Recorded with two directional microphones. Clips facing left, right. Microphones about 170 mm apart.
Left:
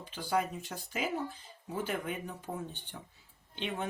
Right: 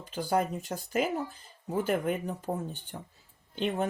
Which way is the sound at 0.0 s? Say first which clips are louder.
Right 4 dB; 45° right (ahead or behind).